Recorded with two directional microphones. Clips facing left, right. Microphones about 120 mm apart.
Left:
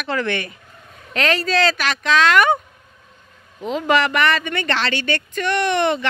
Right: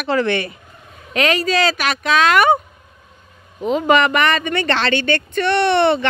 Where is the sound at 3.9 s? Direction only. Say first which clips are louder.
Right 2 dB; 20° right (ahead or behind).